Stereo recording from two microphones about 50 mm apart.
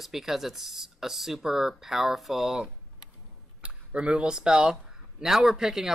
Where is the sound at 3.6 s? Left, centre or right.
Right.